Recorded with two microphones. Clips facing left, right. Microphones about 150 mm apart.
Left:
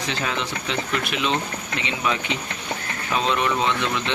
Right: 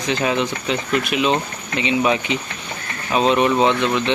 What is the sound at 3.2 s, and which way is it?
Speech, 20° right (ahead or behind).